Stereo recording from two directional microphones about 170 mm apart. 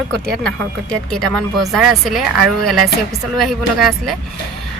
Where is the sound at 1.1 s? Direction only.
Centre (ahead or behind).